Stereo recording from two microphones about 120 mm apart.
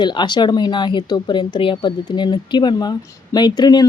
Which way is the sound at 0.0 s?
40° left (ahead or behind).